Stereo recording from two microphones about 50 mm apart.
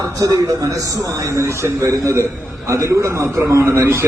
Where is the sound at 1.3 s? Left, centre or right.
Right.